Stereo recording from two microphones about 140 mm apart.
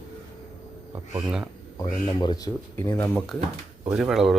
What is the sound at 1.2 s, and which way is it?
Speech, 5° right (ahead or behind).